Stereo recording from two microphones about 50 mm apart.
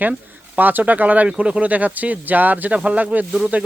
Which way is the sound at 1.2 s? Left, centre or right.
Right.